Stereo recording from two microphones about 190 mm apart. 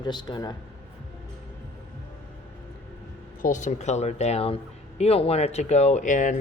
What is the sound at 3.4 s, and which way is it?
Speech, 40° left (ahead or behind).